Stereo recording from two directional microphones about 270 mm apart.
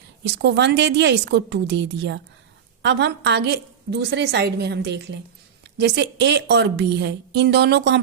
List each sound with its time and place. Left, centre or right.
0.3 s a woman's voice: right